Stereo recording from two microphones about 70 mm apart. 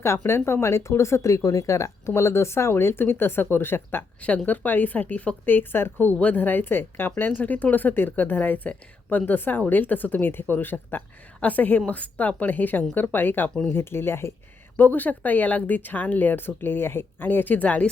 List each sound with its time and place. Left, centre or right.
0.0 s a woman's voice: left
13.5 s speech: centre
13.7 s a woman's voice: left; by 17.9 s centre